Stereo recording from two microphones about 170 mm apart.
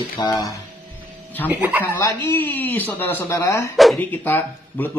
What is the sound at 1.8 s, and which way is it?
Speech, 15° left (ahead or behind).